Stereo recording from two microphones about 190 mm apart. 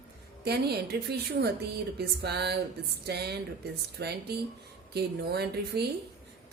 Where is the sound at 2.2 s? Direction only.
60° right (ahead or behind).